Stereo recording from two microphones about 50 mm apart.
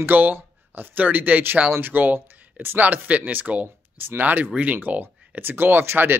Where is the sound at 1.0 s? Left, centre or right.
Right.